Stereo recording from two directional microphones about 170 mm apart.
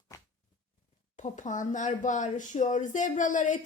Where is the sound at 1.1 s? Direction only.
45° left (ahead or behind).